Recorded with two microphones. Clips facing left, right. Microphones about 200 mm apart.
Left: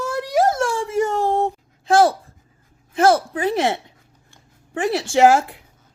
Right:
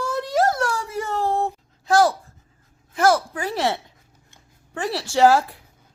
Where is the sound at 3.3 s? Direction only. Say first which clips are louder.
Left 4 dB; 20° left (ahead or behind).